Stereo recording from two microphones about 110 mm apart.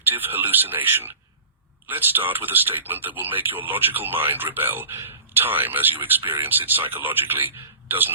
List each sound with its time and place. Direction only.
0.1 s speech: 20° right (ahead or behind)